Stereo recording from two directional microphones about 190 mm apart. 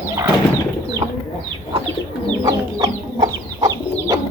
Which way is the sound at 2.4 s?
20° right (ahead or behind).